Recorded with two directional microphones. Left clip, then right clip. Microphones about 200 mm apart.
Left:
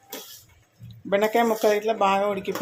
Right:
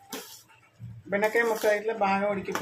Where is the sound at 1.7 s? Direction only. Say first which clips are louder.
Left 4 dB; 40° left (ahead or behind).